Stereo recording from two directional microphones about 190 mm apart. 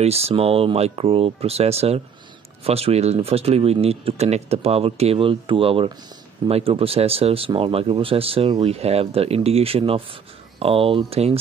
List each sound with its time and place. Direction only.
0.0 s speech: 30° right (ahead or behind)